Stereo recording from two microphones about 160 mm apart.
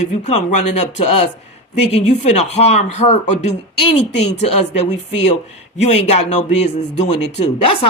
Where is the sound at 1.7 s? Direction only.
40° left (ahead or behind).